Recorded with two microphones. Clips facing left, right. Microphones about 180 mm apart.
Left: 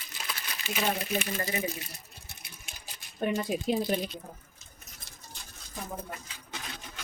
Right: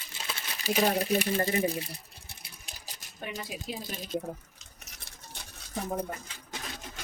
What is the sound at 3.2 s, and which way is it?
Speech, 50° left (ahead or behind).